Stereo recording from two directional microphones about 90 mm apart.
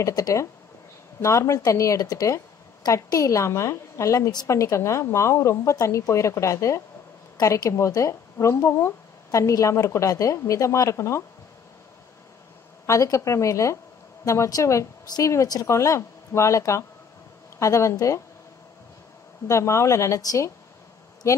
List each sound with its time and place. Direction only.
0.0 s speech: 40° left (ahead or behind)
12.8 s speech: 35° left (ahead or behind)
19.4 s speech: 35° left (ahead or behind)